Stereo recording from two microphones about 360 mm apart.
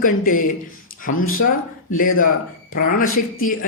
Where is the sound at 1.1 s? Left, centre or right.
Left.